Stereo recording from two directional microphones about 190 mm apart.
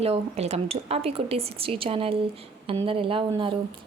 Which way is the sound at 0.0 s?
35° right (ahead or behind).